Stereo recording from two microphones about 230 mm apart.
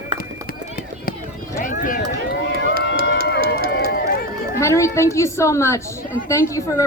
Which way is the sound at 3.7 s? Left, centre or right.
Left.